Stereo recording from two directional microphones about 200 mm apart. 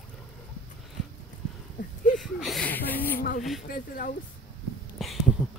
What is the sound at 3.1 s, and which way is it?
Speech, 45° left (ahead or behind).